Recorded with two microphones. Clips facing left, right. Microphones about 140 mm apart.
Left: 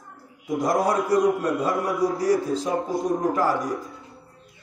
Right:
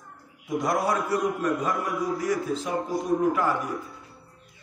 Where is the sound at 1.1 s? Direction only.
35° left (ahead or behind).